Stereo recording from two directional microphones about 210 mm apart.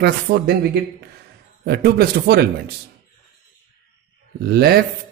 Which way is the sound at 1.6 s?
50° right (ahead or behind).